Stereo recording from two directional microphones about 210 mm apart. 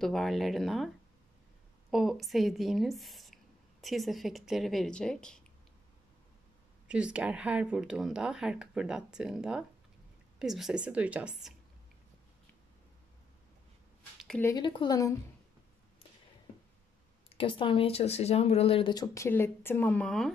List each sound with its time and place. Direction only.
0.0 s speech: centre (ahead or behind)
6.9 s speech: 5° right (ahead or behind)
14.1 s a sound: centre (ahead or behind)
14.4 s speech: 20° left (ahead or behind)
17.3 s speech: 25° left (ahead or behind); by 20.3 s centre (ahead or behind)